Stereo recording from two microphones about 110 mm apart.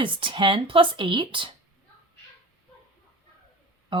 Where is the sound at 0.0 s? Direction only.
50° right (ahead or behind).